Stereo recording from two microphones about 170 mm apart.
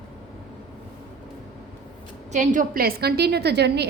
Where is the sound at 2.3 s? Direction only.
50° right (ahead or behind); by 3.9 s 80° right.